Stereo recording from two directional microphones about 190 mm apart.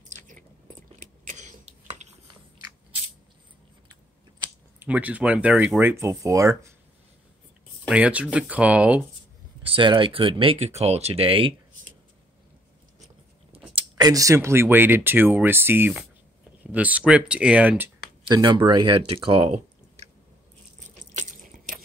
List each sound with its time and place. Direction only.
0.1 s chewing: 40° right (ahead or behind)
4.7 s speech: 10° right (ahead or behind)
7.9 s speech: 5° right (ahead or behind)
9.6 s speech: 25° right (ahead or behind)
13.7 s speech: 20° right (ahead or behind)
18.3 s speech: 20° right (ahead or behind)
21.2 s drip: 45° right (ahead or behind)